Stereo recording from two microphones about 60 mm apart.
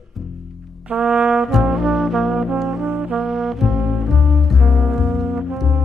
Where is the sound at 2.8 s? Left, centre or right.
Right.